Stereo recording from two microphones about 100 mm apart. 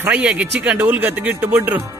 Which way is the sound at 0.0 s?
15° right (ahead or behind).